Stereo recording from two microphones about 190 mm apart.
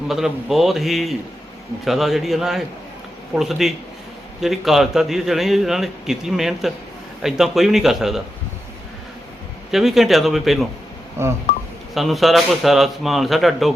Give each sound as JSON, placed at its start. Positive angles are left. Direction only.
{"t": 0.1, "sound": "a man's voice", "side_deg": 0}
{"t": 9.7, "sound": "a man's voice", "side_deg": 0}
{"t": 11.2, "sound": "telephone dialing", "side_deg": -15}
{"t": 11.9, "sound": "a man's voice", "side_deg": 0}